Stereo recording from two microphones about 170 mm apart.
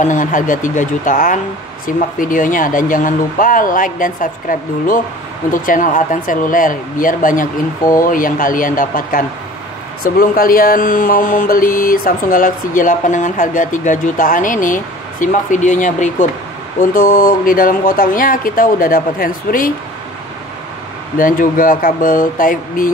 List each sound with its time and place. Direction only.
0.0 s speech: 50° left (ahead or behind)
21.2 s speech: 55° left (ahead or behind)